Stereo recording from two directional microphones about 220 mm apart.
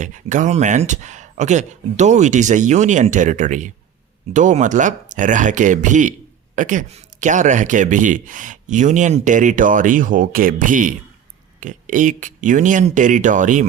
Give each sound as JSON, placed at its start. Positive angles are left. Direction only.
{"t": 0.0, "sound": "speech", "side_deg": -35}